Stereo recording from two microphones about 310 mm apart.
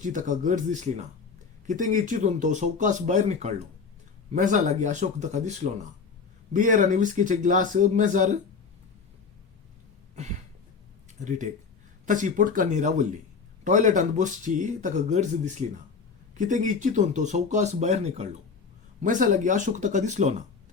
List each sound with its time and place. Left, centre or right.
0.0 s speech: right
12.0 s speech: right
16.3 s speech: right